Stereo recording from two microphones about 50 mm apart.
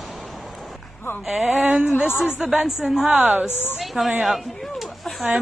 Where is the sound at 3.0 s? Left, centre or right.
Right.